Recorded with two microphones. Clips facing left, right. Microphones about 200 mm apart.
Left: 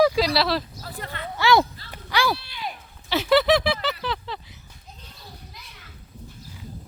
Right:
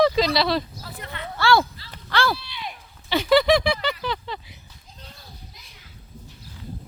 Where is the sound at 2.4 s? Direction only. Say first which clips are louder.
Left 2 dB; 45° left (ahead or behind).